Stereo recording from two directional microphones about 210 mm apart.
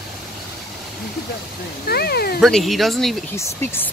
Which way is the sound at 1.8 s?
50° left (ahead or behind).